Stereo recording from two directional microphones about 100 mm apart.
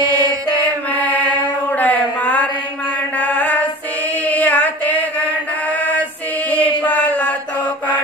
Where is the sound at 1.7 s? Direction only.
15° left (ahead or behind).